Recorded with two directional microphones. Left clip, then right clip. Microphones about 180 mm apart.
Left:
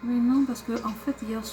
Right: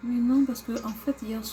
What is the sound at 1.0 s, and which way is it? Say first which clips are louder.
Speech: even; centre (ahead or behind).